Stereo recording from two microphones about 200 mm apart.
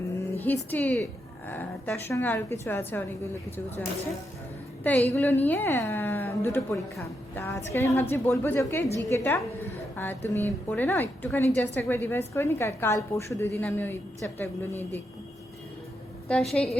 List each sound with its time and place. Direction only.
0.3 s a woman's voice: 10° left (ahead or behind)
4.8 s a woman's voice: 10° left (ahead or behind)
16.3 s a woman's voice: 5° left (ahead or behind)